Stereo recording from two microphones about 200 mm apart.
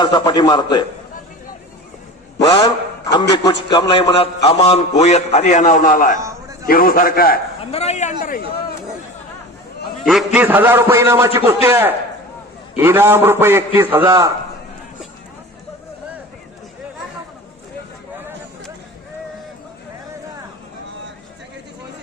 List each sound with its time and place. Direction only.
0.0 s a man's voice: 25° left (ahead or behind)
2.5 s a man's voice: 20° left (ahead or behind); by 6.1 s 40° left (ahead or behind)
6.2 s a sound: 15° right (ahead or behind)
6.7 s a man's voice: 45° left (ahead or behind)
7.6 s a man's voice: 30° left (ahead or behind)
10.1 s a man's voice: 5° right (ahead or behind)